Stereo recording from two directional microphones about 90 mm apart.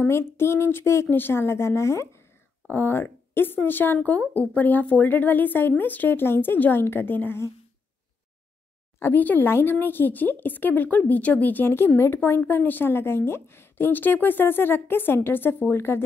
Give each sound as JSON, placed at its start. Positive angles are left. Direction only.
{"t": 0.0, "sound": "speech", "side_deg": 25}
{"t": 9.0, "sound": "speech", "side_deg": 20}